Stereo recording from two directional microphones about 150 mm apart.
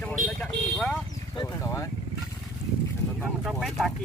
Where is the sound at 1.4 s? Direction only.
20° left (ahead or behind).